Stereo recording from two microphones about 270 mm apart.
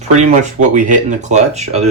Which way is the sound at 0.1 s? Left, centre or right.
Right.